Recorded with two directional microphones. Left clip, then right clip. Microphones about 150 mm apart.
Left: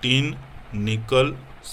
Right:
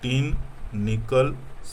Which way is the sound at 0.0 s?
15° left (ahead or behind).